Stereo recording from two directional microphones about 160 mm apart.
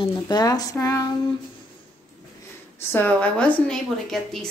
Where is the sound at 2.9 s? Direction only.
10° left (ahead or behind).